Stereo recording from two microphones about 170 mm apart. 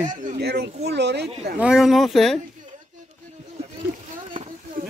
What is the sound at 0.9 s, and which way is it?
Speech, 85° right.